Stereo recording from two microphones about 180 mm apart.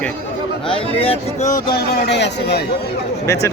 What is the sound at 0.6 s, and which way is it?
Speech, 30° left (ahead or behind).